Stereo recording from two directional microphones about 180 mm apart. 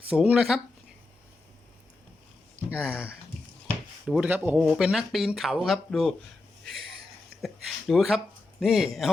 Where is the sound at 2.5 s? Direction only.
5° right (ahead or behind).